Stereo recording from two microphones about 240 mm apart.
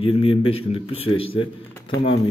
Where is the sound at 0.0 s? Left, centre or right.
Left.